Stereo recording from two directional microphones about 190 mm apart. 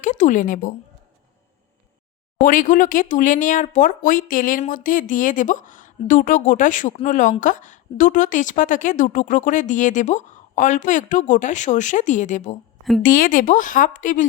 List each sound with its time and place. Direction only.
0.0 s a woman's voice: 40° left (ahead or behind)
2.4 s speech: 45° left (ahead or behind)